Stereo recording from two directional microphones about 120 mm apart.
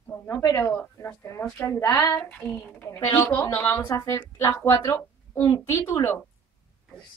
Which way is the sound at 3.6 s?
15° left (ahead or behind).